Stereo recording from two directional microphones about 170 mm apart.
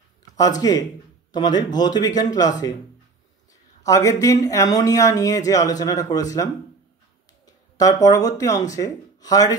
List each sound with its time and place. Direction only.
0.6 s speech: 20° left (ahead or behind)
3.8 s speech: 20° left (ahead or behind)
7.4 s speech: 20° left (ahead or behind)